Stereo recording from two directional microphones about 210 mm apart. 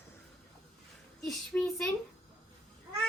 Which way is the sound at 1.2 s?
Centre (ahead or behind).